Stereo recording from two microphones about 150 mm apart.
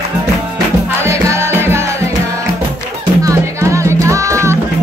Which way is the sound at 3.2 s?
20° right (ahead or behind).